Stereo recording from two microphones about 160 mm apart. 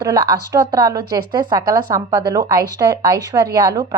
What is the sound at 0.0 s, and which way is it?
A woman's voice, 25° right (ahead or behind).